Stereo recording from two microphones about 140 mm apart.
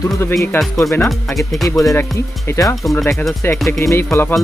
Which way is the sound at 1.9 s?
20° left (ahead or behind).